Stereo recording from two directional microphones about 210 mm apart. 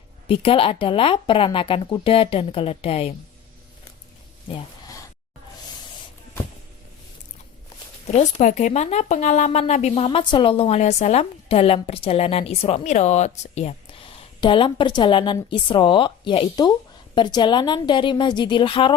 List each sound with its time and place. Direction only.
0.3 s speech: 25° left (ahead or behind)
4.4 s a sound: 20° left (ahead or behind)
8.0 s speech: 35° left (ahead or behind)